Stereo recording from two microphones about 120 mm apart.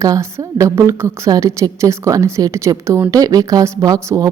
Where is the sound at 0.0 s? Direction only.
25° right (ahead or behind).